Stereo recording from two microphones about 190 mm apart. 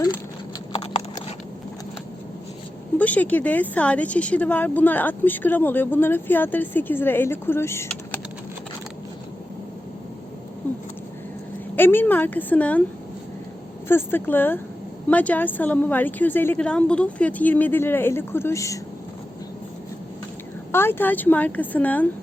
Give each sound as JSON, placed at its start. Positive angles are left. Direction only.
{"t": 3.0, "sound": "a woman's voice", "side_deg": 10}
{"t": 11.8, "sound": "a woman's voice", "side_deg": 10}
{"t": 13.8, "sound": "a woman's voice", "side_deg": 10}
{"t": 20.7, "sound": "a woman's voice", "side_deg": 10}